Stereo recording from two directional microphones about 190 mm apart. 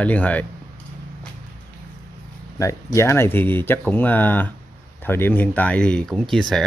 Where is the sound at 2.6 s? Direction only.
15° left (ahead or behind).